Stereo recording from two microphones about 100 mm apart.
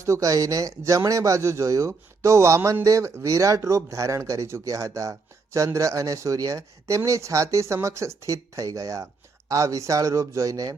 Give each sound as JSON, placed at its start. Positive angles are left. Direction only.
{"t": 0.0, "sound": "speech", "side_deg": -35}